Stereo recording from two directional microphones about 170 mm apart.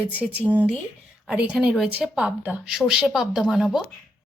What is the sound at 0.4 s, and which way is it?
A woman's voice, 10° right (ahead or behind).